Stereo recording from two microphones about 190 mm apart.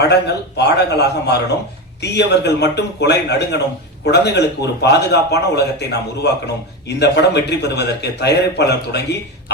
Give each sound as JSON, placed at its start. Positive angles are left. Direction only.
{"t": 0.0, "sound": "a man's voice", "side_deg": 60}